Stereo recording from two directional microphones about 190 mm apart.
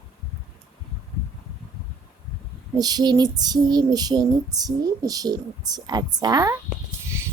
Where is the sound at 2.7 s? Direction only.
20° right (ahead or behind).